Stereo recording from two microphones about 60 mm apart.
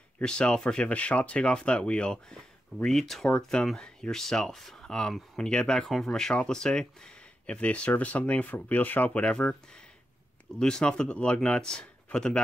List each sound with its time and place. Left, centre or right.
0.2 s speech: centre